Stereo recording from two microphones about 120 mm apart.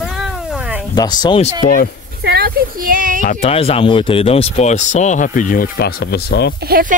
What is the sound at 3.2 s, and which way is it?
Speech, 60° left (ahead or behind).